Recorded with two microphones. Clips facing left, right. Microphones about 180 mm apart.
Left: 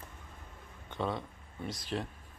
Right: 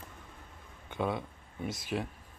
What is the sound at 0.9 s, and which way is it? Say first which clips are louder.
Speech: right 2 dB; 10° right (ahead or behind).